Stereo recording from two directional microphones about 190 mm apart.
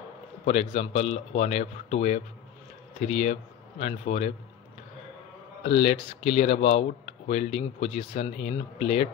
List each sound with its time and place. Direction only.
0.5 s speech: 35° left (ahead or behind)
5.6 s speech: 35° left (ahead or behind)